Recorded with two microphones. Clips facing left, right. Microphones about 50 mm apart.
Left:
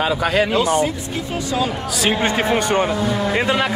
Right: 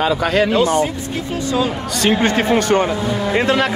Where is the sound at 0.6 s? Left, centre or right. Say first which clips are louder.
Right 2 dB; left.